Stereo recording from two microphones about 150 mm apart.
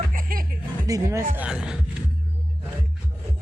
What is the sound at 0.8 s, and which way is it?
Speech, 20° right (ahead or behind).